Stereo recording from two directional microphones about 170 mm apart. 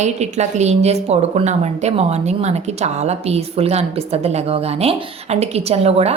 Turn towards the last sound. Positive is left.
turn(degrees=-35)  # may be behind; listen again after turning